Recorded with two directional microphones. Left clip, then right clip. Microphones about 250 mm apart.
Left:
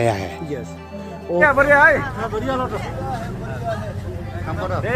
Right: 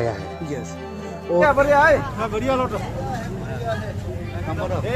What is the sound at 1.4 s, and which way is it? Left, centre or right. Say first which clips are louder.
Speech: left 3 dB; left.